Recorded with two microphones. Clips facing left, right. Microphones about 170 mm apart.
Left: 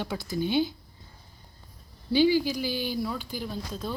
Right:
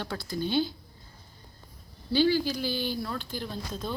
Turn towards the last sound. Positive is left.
turn(degrees=5)  # may be behind; listen again after turning